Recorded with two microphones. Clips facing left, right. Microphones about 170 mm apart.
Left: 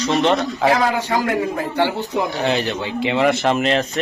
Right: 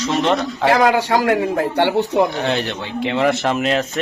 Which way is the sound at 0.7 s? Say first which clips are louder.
Right 6 dB; 70° right (ahead or behind).